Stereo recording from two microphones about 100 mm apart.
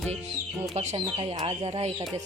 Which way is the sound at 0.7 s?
90° right.